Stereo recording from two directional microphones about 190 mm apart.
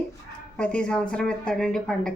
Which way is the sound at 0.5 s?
5° left (ahead or behind).